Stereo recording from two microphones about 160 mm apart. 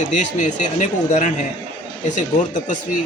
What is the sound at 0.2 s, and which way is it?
Speech, 50° left (ahead or behind).